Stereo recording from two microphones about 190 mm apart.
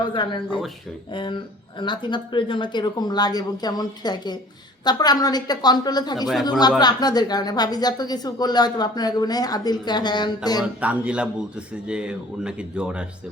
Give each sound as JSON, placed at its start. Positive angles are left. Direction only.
{"t": 0.0, "sound": "a woman's voice", "side_deg": 25}
{"t": 10.6, "sound": "speech", "side_deg": -5}